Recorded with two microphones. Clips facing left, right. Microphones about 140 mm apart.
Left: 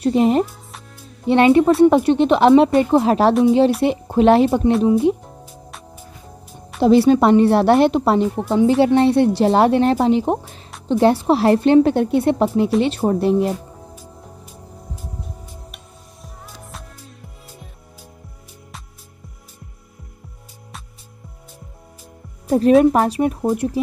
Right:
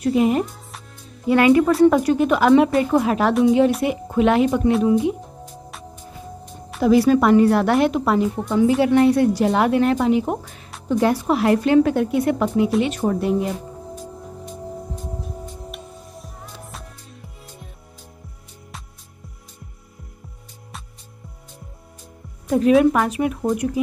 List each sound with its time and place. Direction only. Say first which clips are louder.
0.0 s a woman's voice: left 2 dB; 30° left (ahead or behind)
5.4 s music: right 2 dB; centre (ahead or behind)
6.8 s a woman's voice: left 3 dB; 30° left (ahead or behind)
22.8 s speech: left 3 dB; 35° left (ahead or behind)